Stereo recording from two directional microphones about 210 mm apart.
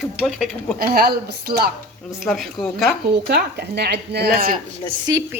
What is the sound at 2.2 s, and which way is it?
Speech, centre (ahead or behind).